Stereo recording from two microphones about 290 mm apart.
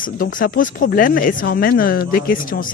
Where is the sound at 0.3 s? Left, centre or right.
Left.